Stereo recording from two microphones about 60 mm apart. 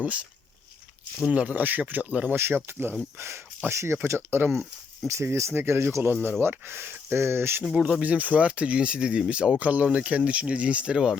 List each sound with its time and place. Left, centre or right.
0.0 s speech: right
1.3 s speech: right
2.3 s speech: right
5.0 s speech: right
7.6 s speech: centre
8.0 s speech: right